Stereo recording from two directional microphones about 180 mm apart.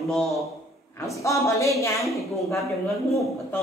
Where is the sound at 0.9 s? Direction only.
15° left (ahead or behind).